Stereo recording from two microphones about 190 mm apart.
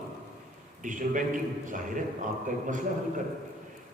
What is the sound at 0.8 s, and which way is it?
Speech, 45° right (ahead or behind).